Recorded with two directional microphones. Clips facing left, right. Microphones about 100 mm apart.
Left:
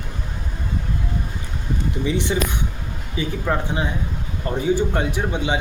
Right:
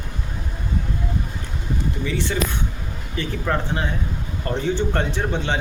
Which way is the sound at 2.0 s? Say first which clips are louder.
Left 3 dB; 15° left (ahead or behind).